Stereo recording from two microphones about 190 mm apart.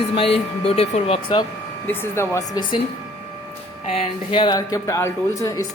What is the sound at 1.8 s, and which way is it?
Speech, 10° left (ahead or behind).